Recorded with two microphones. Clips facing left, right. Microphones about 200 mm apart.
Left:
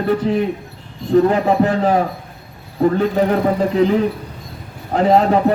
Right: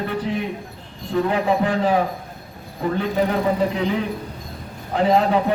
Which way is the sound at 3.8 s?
40° left (ahead or behind).